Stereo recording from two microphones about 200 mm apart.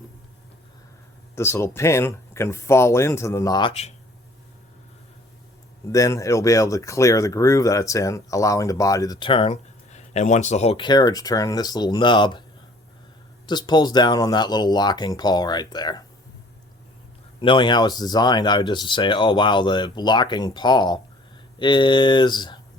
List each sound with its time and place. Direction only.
1.4 s speech: 15° left (ahead or behind); by 3.9 s 30° left (ahead or behind)
5.8 s speech: 15° left (ahead or behind)
13.5 s speech: 20° left (ahead or behind)
17.4 s speech: 25° left (ahead or behind)